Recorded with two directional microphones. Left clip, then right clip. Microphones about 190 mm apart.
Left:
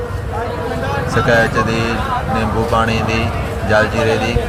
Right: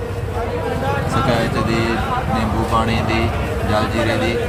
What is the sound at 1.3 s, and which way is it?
Speech, 15° left (ahead or behind).